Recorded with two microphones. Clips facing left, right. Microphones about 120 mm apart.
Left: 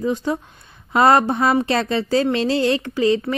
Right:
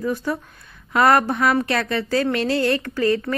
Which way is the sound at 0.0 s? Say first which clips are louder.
Left 2 dB; 20° left (ahead or behind).